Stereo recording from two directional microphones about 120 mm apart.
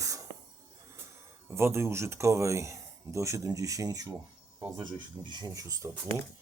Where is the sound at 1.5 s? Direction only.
20° right (ahead or behind).